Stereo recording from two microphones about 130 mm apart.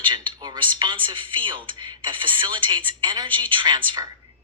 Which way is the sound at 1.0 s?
40° right (ahead or behind).